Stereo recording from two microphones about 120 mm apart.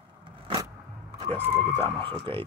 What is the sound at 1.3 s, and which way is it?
Speech, 15° right (ahead or behind).